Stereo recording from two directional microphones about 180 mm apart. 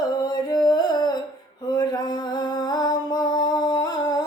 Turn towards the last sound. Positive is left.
turn(degrees=20)  # may be behind; listen again after turning